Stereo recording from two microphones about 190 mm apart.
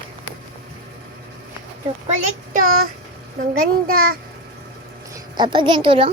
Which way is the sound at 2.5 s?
45° right (ahead or behind).